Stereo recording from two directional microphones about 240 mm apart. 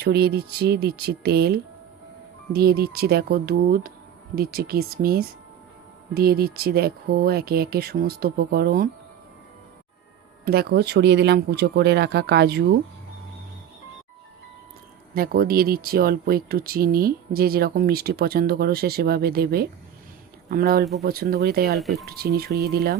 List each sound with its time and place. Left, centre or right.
0.0 s speech: right
10.4 s speech: right
15.1 s speech: right
21.8 s speech: centre
22.0 s speech: right